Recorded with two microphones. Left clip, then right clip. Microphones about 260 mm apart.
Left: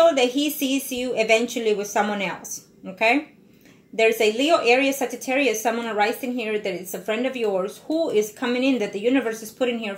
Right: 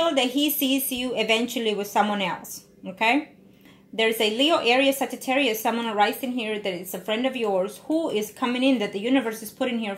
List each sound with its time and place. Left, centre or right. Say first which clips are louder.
0.1 s a woman's voice: left 2 dB; right
4.2 s a woman's voice: left 2 dB; right